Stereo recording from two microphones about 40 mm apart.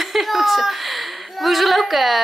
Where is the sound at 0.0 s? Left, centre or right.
Centre.